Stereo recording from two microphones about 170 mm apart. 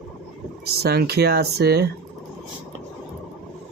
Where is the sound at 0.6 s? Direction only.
70° right (ahead or behind).